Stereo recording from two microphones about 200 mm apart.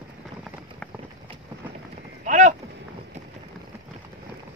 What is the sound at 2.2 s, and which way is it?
Speech, 40° right (ahead or behind).